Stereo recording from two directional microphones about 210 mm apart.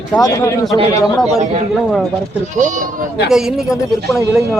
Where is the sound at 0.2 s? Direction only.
15° left (ahead or behind).